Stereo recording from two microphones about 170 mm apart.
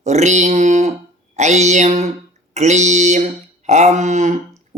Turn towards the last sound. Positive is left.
turn(degrees=-45)  # may be behind; listen again after turning